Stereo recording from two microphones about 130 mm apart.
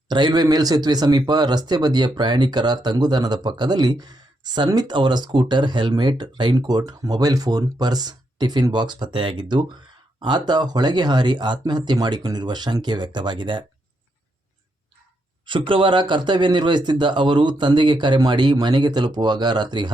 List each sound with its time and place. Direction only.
0.1 s a man's voice: 35° right (ahead or behind)
15.4 s a man's voice: 40° right (ahead or behind)